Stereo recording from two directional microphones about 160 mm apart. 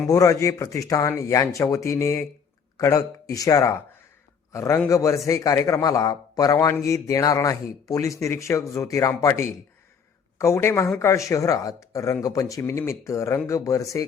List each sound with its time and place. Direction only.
0.1 s a man's voice: 20° left (ahead or behind)